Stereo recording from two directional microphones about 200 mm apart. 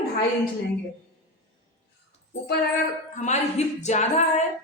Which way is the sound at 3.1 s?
35° left (ahead or behind).